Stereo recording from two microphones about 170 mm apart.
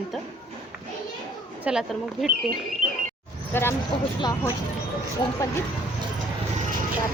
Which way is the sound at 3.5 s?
15° left (ahead or behind).